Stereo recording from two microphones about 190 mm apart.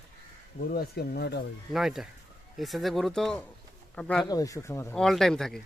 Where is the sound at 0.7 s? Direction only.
55° left (ahead or behind).